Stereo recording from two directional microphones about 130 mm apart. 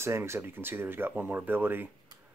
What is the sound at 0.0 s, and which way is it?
Speech, 20° right (ahead or behind).